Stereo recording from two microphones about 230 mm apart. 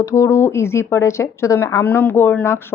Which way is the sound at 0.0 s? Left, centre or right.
Centre.